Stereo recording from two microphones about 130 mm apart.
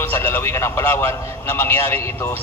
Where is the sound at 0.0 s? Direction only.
15° left (ahead or behind).